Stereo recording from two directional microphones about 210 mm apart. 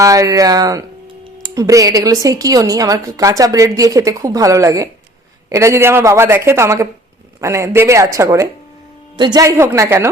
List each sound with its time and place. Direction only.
0.0 s speech: 15° right (ahead or behind)